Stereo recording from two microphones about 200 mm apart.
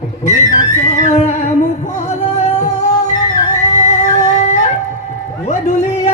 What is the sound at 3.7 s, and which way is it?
Music, 35° left (ahead or behind).